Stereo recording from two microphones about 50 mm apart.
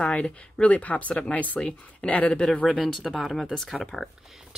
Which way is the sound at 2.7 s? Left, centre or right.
Centre.